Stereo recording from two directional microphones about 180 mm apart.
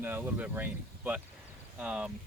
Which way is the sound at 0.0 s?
10° right (ahead or behind).